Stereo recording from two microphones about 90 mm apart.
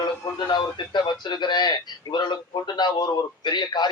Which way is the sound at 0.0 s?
55° left (ahead or behind).